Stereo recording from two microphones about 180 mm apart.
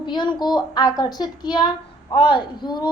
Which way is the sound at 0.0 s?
25° left (ahead or behind).